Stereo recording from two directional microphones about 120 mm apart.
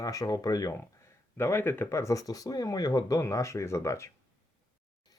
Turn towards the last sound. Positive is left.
turn(degrees=25)  # may be behind; listen again after turning